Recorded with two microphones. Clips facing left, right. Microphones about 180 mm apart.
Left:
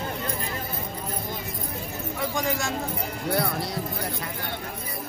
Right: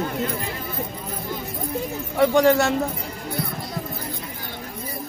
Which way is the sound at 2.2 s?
70° right (ahead or behind).